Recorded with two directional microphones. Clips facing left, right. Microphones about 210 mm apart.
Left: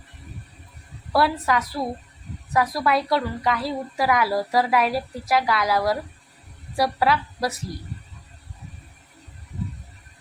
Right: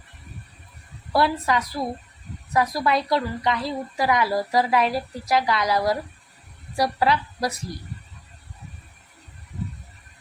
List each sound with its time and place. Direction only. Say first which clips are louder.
1.1 s a woman's voice: even; 5° left (ahead or behind)